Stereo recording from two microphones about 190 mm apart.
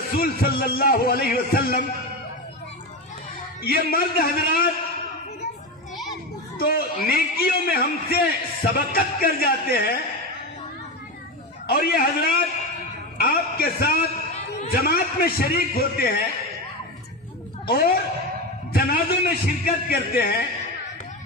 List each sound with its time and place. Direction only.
0.2 s a man's voice: 50° left (ahead or behind)
3.6 s a man's voice: 50° left (ahead or behind)
6.6 s a man's voice: 50° left (ahead or behind)
11.6 s a man's voice: 55° left (ahead or behind)
17.6 s a man's voice: 50° left (ahead or behind)